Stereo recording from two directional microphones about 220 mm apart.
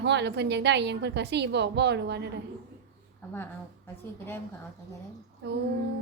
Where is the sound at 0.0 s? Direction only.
50° right (ahead or behind).